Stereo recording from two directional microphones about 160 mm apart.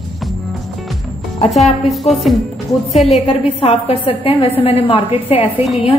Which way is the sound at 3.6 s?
35° left (ahead or behind).